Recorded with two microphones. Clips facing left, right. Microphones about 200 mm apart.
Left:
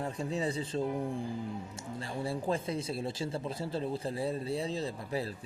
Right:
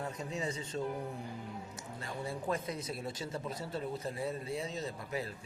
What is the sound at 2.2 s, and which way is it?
Speech, 30° left (ahead or behind).